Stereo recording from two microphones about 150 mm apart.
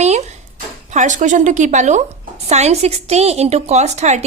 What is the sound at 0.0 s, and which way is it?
Dishes, 50° right (ahead or behind).